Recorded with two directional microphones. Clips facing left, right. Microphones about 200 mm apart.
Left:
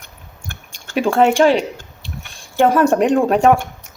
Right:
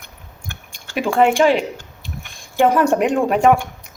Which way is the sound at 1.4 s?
40° left (ahead or behind).